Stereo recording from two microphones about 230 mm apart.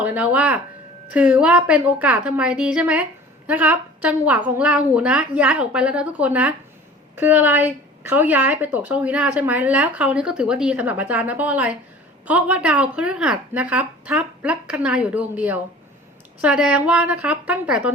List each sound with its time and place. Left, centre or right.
0.0 s a woman's voice: centre